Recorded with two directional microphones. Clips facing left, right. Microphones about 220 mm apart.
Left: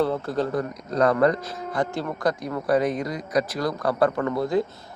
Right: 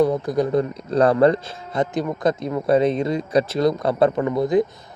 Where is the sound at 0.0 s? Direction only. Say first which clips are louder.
Right 5 dB; 15° right (ahead or behind).